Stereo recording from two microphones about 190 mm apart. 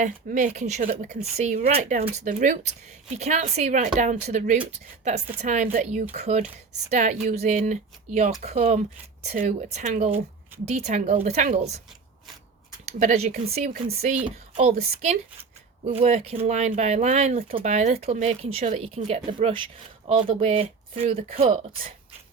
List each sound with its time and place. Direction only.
0.0 s speech: 45° right (ahead or behind)
9.3 s speech: 45° right (ahead or behind)
13.0 s speech: 35° right (ahead or behind)